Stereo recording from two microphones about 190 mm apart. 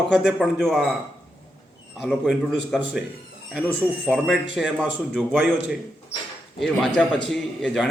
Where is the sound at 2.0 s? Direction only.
Centre (ahead or behind).